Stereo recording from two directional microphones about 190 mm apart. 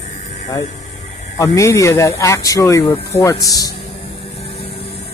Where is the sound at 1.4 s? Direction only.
15° left (ahead or behind).